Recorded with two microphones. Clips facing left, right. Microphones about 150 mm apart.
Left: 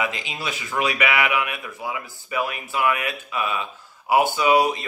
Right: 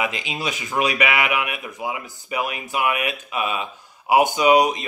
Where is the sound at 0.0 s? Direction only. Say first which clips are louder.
Right 2 dB; 20° right (ahead or behind).